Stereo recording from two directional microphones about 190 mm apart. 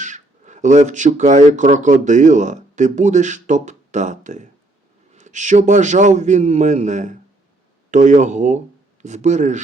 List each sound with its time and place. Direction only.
0.0 s a man's voice: 40° right (ahead or behind)